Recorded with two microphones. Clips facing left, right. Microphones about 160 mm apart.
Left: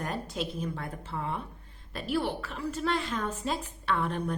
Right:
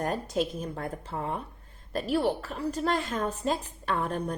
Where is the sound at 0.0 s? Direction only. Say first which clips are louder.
Right 5 dB; 45° right (ahead or behind).